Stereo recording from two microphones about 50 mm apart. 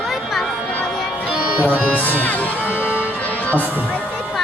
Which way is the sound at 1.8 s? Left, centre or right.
Left.